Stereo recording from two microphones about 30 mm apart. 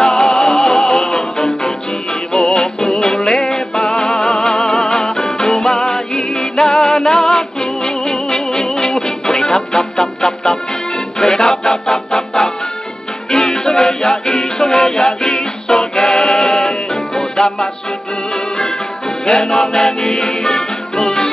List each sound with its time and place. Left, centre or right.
0.0 s music: left
2.3 s music: left
13.3 s music: left
16.9 s music: centre